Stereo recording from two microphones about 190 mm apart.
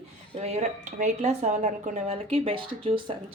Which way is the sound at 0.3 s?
35° right (ahead or behind).